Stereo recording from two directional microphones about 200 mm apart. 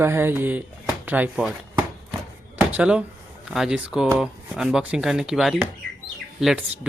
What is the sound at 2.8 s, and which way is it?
Speech, 5° right (ahead or behind).